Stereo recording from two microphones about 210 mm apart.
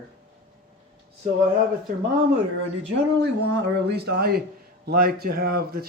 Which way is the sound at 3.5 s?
55° right (ahead or behind).